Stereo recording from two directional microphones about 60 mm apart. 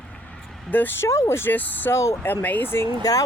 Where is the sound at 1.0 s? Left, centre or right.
Left.